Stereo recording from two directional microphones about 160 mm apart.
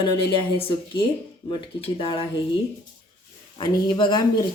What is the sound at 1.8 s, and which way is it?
Speech, 35° left (ahead or behind).